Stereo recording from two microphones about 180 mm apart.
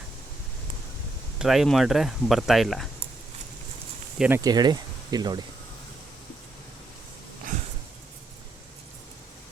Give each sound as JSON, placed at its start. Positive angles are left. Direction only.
{"t": 1.4, "sound": "speech", "side_deg": 0}
{"t": 4.4, "sound": "speech", "side_deg": -20}